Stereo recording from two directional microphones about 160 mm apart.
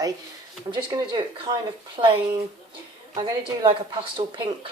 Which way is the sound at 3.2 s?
25° right (ahead or behind).